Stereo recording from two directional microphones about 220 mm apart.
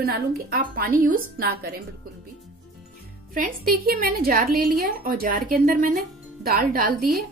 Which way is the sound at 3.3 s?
40° right (ahead or behind).